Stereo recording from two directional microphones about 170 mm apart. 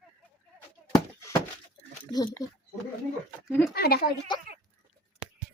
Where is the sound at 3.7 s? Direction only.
65° left (ahead or behind).